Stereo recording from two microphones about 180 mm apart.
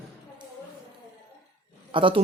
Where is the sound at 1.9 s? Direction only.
30° right (ahead or behind).